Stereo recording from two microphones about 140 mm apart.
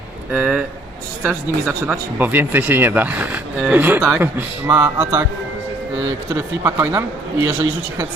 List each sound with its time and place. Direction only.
0.3 s speech: 5° right (ahead or behind)
6.3 s speech: 20° right (ahead or behind)